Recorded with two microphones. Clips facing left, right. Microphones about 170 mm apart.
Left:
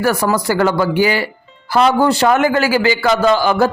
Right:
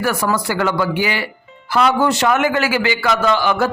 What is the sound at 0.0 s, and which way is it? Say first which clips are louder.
Speech: left 3 dB; 40° left (ahead or behind).